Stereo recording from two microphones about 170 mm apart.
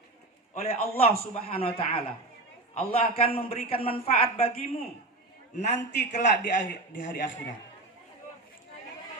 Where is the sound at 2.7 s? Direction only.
35° left (ahead or behind).